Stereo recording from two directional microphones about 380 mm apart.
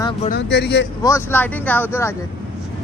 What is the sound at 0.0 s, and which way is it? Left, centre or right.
Speech, centre.